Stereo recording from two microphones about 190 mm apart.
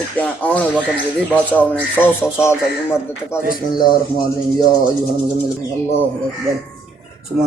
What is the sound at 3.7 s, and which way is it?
Speech, 20° left (ahead or behind).